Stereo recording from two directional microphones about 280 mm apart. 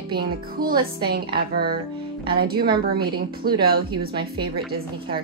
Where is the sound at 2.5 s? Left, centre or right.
Centre.